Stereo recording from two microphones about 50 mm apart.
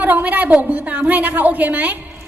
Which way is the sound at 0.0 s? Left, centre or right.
Right.